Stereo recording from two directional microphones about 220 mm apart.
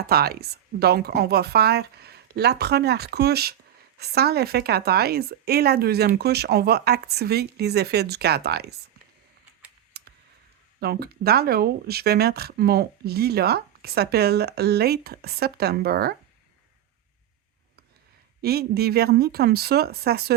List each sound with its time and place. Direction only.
0.1 s speech: 45° right (ahead or behind)
10.0 s clicking: 45° right (ahead or behind)
10.8 s speech: 45° right (ahead or behind)
18.4 s speech: 45° right (ahead or behind)